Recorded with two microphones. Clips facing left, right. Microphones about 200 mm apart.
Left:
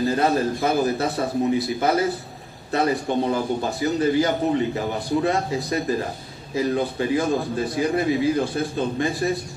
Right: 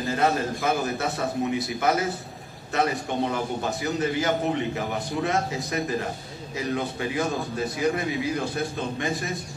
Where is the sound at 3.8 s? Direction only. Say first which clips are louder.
Left 6 dB; 35° left (ahead or behind).